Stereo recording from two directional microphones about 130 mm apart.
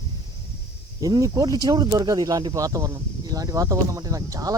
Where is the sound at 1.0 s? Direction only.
30° right (ahead or behind).